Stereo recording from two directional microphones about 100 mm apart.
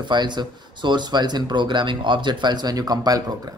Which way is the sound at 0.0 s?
50° right (ahead or behind).